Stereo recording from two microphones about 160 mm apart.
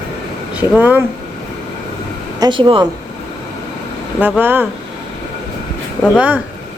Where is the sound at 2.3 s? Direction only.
25° right (ahead or behind).